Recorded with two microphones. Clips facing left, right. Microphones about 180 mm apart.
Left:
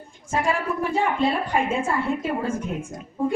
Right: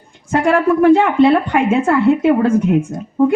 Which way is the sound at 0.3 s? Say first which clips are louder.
Right 11 dB; 70° right (ahead or behind).